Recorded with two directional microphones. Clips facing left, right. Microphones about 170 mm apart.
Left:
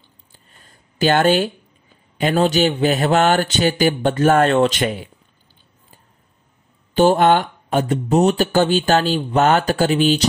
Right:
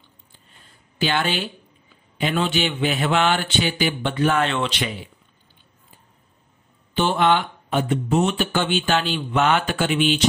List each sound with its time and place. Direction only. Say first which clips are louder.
0.3 s a sound: left 4 dB; 45° left (ahead or behind)
2.1 s a man's voice: left 6 dB; 40° left (ahead or behind)
6.9 s speech: left 6 dB; 45° left (ahead or behind)